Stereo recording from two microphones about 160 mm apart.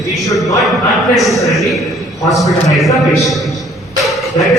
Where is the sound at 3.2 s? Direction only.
Centre (ahead or behind).